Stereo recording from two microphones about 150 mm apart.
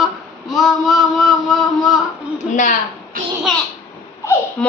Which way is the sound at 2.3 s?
55° left (ahead or behind).